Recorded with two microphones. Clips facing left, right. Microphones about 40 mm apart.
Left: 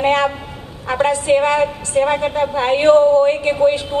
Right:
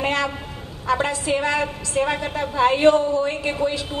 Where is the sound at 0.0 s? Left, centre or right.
Left.